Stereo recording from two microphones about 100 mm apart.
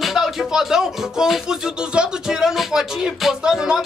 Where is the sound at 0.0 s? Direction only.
5° right (ahead or behind).